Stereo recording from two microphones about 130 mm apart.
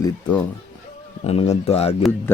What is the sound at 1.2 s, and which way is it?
Speech, 55° left (ahead or behind).